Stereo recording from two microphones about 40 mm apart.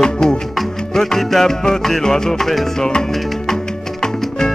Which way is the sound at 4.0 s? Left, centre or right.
Centre.